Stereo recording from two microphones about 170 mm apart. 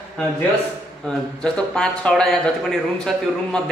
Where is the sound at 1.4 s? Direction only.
5° left (ahead or behind).